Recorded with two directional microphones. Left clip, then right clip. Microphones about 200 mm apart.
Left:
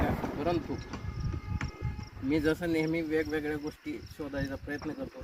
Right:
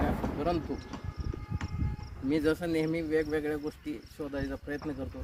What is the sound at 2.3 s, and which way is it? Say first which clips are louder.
Speech: even; 20° right (ahead or behind).